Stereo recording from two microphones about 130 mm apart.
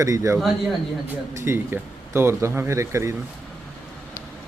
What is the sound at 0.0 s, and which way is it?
Speech, 25° right (ahead or behind).